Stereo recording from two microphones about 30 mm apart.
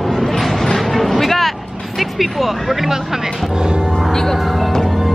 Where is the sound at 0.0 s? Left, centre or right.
Centre.